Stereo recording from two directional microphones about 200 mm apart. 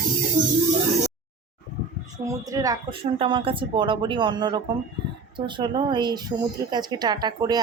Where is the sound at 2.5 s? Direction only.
15° right (ahead or behind).